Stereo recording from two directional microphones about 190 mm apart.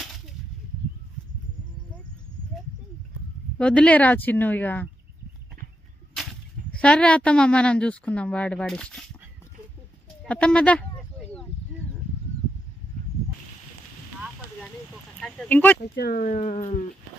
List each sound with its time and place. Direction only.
3.5 s a woman's voice: 5° left (ahead or behind)
6.1 s speech: 5° left (ahead or behind)
10.2 s a sound: 5° left (ahead or behind)
15.1 s a woman's voice: 5° left (ahead or behind)
16.0 s speech: 50° left (ahead or behind)